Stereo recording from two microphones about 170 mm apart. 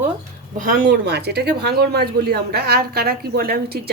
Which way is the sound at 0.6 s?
55° right (ahead or behind).